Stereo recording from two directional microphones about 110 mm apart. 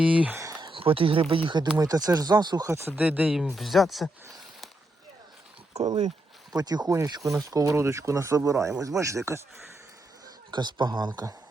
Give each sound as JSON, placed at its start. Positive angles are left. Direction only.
{"t": 0.0, "sound": "speech", "side_deg": -10}
{"t": 0.6, "sound": "speech", "side_deg": -55}
{"t": 1.8, "sound": "speech", "side_deg": -35}
{"t": 2.6, "sound": "speech", "side_deg": -25}
{"t": 2.9, "sound": "speech", "side_deg": -10}
{"t": 3.3, "sound": "speech", "side_deg": 0}
{"t": 5.7, "sound": "speech", "side_deg": -35}
{"t": 10.5, "sound": "speech", "side_deg": -45}